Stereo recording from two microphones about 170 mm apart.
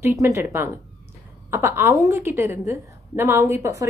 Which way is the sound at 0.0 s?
15° right (ahead or behind).